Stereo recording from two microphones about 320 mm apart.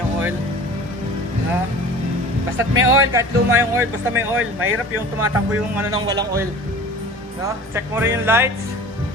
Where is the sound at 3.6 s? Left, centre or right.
Centre.